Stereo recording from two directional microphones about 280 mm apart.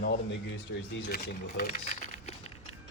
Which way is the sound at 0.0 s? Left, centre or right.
Left.